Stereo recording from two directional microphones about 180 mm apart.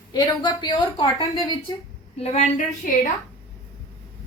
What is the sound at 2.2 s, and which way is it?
Speech, 40° left (ahead or behind).